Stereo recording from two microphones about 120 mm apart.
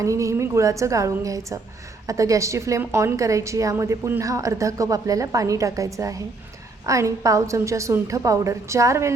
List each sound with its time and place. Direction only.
0.0 s a woman's voice: 25° right (ahead or behind)